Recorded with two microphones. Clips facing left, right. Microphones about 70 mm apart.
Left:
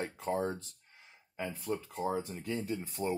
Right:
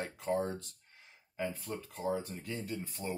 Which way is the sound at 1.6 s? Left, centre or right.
Left.